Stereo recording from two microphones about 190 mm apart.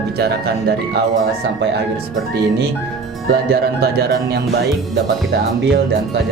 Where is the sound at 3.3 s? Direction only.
55° right (ahead or behind).